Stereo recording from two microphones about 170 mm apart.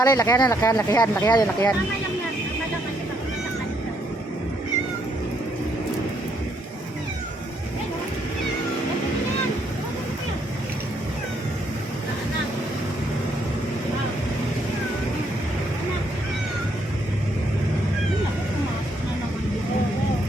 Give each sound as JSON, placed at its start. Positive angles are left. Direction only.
{"t": 0.0, "sound": "speech", "side_deg": 20}